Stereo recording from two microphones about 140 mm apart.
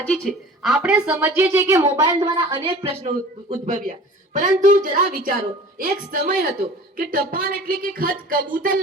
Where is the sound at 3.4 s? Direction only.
55° right (ahead or behind); by 8.4 s 90° right.